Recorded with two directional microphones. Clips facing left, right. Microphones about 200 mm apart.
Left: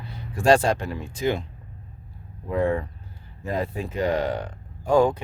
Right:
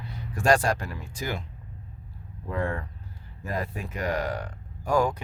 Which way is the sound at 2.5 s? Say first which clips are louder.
Left 7 dB; 20° left (ahead or behind).